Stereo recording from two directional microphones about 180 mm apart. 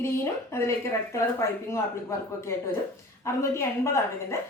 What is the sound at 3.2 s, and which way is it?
Speech, 15° left (ahead or behind).